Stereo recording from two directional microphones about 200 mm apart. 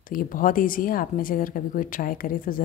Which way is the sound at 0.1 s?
45° left (ahead or behind).